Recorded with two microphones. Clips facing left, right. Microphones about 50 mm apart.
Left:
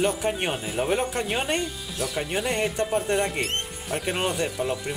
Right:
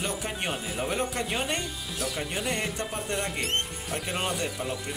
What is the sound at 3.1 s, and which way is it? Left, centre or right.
Speech, left.